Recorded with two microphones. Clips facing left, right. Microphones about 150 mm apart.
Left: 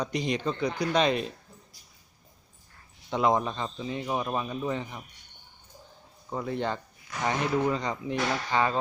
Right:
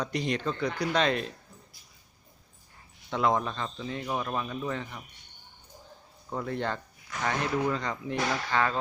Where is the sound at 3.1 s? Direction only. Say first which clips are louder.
Left 2 dB; 15° left (ahead or behind).